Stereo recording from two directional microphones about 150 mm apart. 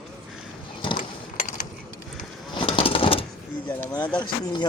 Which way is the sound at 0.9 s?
55° left (ahead or behind).